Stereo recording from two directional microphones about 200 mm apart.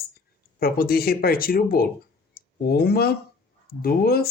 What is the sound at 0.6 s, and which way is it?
Speech, 50° left (ahead or behind).